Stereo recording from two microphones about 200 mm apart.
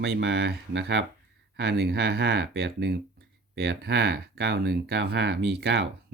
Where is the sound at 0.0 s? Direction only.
55° right (ahead or behind).